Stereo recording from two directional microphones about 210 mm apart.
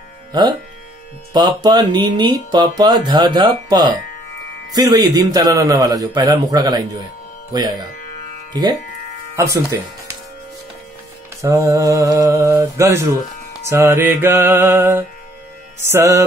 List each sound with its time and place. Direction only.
0.3 s speech: 20° right (ahead or behind)
9.4 s speech: 15° right (ahead or behind)
11.4 s speech: 15° right (ahead or behind)